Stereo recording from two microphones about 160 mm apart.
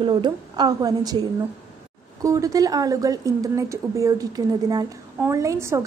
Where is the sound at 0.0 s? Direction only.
30° right (ahead or behind).